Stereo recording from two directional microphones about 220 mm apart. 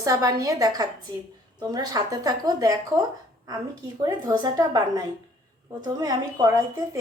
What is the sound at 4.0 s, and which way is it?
A woman's voice, 15° right (ahead or behind).